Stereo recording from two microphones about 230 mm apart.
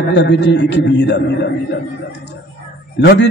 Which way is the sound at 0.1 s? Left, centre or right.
Left.